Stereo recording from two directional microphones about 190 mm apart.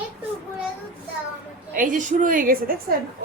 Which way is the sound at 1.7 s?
45° right (ahead or behind).